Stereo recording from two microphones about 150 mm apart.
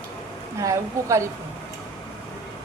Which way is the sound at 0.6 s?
20° right (ahead or behind).